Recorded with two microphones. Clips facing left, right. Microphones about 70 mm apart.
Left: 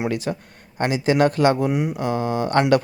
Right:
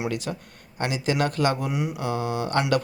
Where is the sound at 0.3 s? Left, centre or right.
Left.